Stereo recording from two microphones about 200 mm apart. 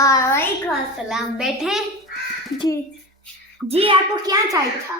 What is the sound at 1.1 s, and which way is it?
Speech, centre (ahead or behind).